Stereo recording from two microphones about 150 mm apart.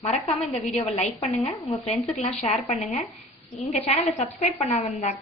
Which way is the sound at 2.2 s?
45° left (ahead or behind).